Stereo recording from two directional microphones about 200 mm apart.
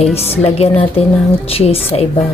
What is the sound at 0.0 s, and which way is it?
Speech, 30° left (ahead or behind).